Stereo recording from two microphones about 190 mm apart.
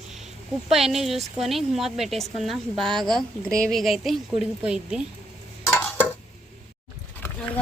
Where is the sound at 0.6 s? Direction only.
Centre (ahead or behind).